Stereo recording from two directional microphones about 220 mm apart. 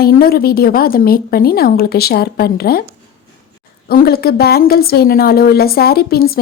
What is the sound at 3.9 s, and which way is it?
A woman's voice, 45° left (ahead or behind).